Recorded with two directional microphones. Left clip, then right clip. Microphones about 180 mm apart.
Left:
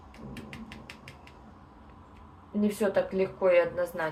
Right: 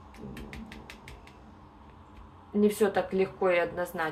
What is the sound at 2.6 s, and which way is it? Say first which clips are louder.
A woman's voice: right 2 dB; 25° right (ahead or behind).